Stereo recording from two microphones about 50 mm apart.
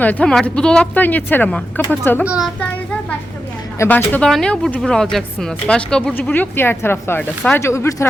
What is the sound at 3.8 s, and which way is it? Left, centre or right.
Speech, left.